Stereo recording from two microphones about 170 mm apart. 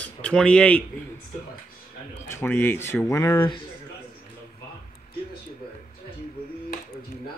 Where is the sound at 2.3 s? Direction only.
15° left (ahead or behind).